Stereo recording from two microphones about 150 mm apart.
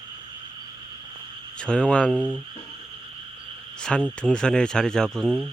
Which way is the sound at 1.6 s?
5° left (ahead or behind).